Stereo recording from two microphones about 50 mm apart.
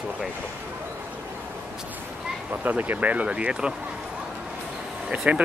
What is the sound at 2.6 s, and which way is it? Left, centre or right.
Speech, right.